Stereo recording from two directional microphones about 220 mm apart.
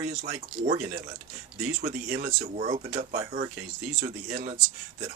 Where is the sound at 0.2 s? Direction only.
35° right (ahead or behind).